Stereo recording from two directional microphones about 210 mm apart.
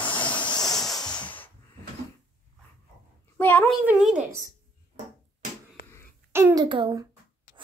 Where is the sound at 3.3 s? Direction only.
10° left (ahead or behind).